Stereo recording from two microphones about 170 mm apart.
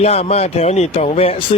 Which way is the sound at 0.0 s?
35° left (ahead or behind).